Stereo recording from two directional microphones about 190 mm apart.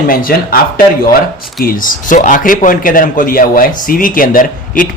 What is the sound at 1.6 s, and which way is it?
A man's voice, 45° left (ahead or behind).